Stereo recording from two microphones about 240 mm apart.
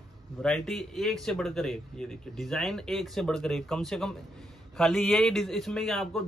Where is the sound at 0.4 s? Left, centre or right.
Centre.